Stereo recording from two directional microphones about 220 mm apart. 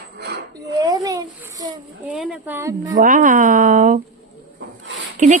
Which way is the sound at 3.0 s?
40° right (ahead or behind).